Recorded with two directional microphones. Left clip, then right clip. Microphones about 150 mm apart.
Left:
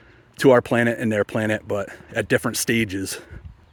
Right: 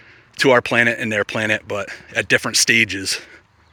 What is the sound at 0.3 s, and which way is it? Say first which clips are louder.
Speech: right 2 dB; 40° left (ahead or behind).